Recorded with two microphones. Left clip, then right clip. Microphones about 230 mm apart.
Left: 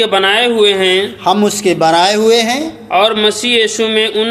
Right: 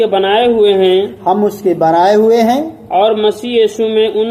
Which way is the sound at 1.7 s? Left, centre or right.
Left.